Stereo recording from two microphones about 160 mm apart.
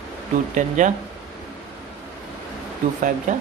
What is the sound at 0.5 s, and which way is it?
Speech, 50° right (ahead or behind).